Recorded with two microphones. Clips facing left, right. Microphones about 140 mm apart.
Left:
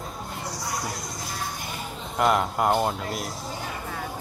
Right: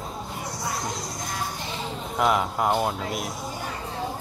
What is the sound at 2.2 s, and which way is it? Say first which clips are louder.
Speech: left 1 dB; centre (ahead or behind).